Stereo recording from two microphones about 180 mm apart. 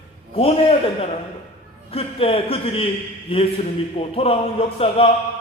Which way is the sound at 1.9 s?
30° left (ahead or behind).